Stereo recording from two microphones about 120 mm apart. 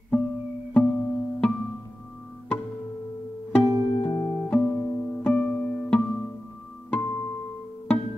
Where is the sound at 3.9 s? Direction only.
35° left (ahead or behind).